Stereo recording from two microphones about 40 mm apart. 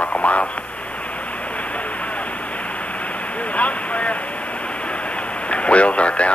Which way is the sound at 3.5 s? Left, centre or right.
Left.